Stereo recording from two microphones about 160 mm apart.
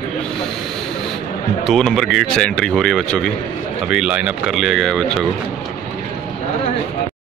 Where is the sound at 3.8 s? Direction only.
5° right (ahead or behind).